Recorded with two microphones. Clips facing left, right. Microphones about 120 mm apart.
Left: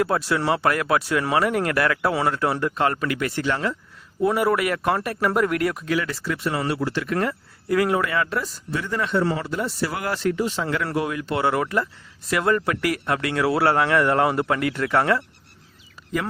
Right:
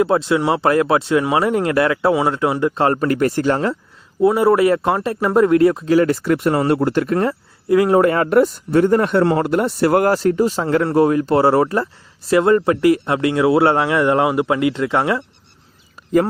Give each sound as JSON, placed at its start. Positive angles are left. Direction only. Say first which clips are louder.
{"t": 0.0, "sound": "speech", "louder": "right 6 dB", "side_deg": -20}
{"t": 2.8, "sound": "speech", "louder": "right 8 dB", "side_deg": -35}
{"t": 4.2, "sound": "speech", "louder": "right 7 dB", "side_deg": -25}
{"t": 6.0, "sound": "speech", "louder": "right 11 dB", "side_deg": -55}
{"t": 7.2, "sound": "speech", "louder": "right 6 dB", "side_deg": -25}
{"t": 7.9, "sound": "speech", "louder": "right 10 dB", "side_deg": -45}